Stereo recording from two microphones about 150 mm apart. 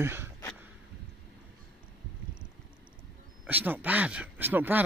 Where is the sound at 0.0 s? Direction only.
15° right (ahead or behind).